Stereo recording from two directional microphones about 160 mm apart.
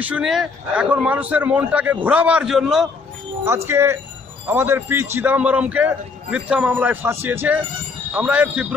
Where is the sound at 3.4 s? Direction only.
15° right (ahead or behind).